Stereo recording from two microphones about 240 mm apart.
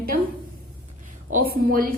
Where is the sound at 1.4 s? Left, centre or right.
Right.